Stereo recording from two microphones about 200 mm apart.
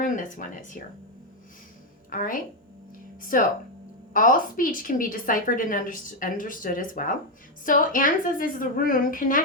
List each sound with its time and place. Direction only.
0.0 s speech: 40° left (ahead or behind)
2.0 s a woman's voice: 40° left (ahead or behind)